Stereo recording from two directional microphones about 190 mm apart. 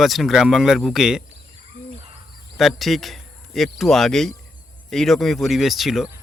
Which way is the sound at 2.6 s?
Centre (ahead or behind).